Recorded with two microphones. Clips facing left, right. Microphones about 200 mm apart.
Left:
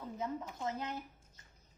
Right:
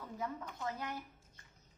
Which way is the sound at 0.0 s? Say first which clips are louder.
Left 3 dB; 20° left (ahead or behind).